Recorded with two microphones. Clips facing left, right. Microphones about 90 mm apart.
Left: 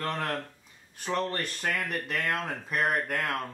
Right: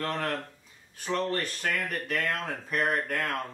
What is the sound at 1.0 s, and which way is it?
Speech, 5° left (ahead or behind).